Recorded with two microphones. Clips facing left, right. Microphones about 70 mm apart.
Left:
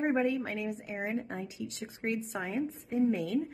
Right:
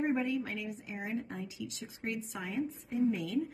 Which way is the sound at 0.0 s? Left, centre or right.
Left.